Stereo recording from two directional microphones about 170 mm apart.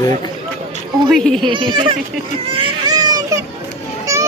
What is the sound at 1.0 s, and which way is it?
Speech, centre (ahead or behind).